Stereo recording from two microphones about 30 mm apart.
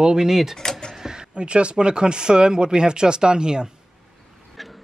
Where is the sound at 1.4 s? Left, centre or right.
Right.